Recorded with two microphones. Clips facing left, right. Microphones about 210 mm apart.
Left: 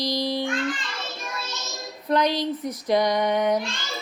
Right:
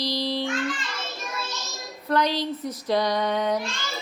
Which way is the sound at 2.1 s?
15° left (ahead or behind).